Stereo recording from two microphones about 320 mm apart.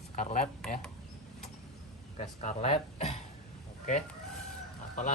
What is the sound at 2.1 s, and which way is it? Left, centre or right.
Speech, left.